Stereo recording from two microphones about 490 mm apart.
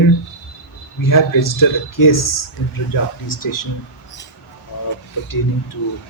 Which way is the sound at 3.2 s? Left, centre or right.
Left.